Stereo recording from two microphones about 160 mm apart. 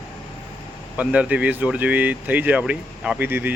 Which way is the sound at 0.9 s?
10° right (ahead or behind).